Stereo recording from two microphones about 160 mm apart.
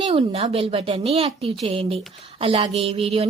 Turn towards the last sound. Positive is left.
turn(degrees=-40)  # may be behind; listen again after turning